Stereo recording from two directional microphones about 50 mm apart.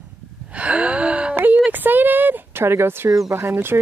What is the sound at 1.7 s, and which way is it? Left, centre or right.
Speech, right.